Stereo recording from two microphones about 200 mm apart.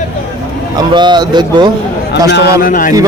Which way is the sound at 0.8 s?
20° right (ahead or behind).